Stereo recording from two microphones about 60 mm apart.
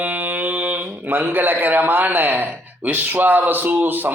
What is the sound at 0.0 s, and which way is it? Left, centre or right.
Speech, right.